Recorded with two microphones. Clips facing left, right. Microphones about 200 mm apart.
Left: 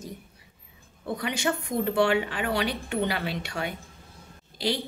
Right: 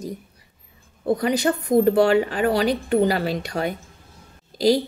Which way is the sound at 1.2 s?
40° right (ahead or behind).